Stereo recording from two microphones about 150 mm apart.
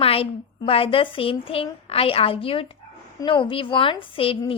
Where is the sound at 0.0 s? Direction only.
40° left (ahead or behind).